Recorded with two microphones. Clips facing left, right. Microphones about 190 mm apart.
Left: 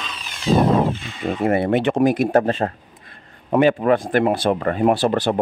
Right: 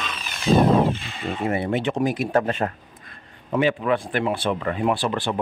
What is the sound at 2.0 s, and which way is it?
Speech, 45° left (ahead or behind).